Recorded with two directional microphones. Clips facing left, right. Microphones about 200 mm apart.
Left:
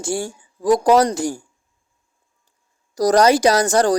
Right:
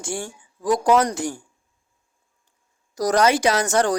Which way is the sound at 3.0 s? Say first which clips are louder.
Left 5 dB; 35° left (ahead or behind).